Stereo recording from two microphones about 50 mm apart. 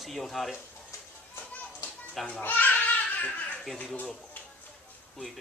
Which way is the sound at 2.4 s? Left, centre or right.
Left.